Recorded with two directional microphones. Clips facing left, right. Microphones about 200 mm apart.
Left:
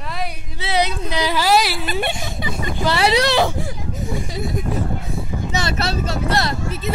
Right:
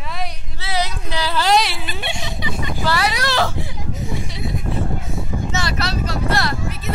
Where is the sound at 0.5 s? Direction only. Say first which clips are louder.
Left 4 dB; 20° left (ahead or behind).